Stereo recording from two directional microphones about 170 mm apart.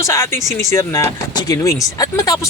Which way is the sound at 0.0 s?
15° left (ahead or behind).